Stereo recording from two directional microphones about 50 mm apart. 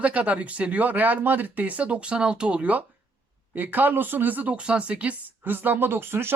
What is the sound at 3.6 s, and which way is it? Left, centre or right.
A woman's voice, right.